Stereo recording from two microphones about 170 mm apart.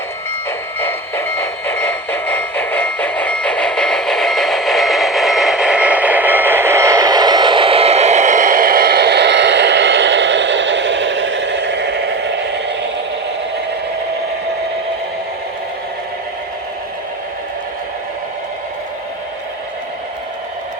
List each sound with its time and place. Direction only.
0.8 s train: 15° left (ahead or behind); by 12.5 s 90° right